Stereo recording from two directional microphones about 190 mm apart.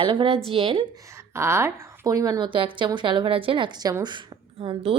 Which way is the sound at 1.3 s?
15° right (ahead or behind).